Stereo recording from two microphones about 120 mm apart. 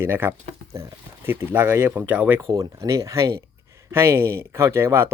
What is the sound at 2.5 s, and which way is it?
Speech, 30° right (ahead or behind).